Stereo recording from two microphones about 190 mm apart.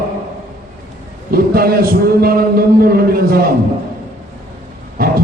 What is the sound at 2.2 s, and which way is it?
Speech, 50° right (ahead or behind).